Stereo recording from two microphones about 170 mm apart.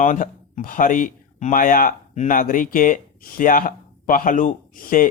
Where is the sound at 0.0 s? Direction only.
45° left (ahead or behind).